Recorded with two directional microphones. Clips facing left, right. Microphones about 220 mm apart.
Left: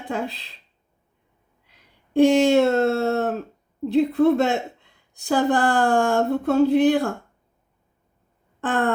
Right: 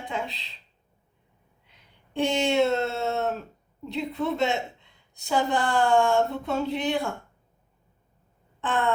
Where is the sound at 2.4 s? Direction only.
55° left (ahead or behind).